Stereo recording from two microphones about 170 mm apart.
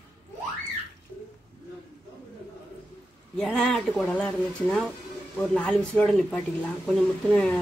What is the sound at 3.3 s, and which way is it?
Speech, 5° left (ahead or behind).